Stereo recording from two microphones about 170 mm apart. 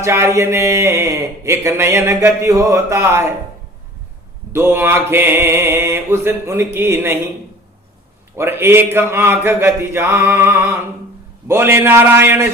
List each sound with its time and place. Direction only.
0.0 s speech: 15° right (ahead or behind)
4.5 s speech: 15° right (ahead or behind)
8.4 s speech: 15° right (ahead or behind)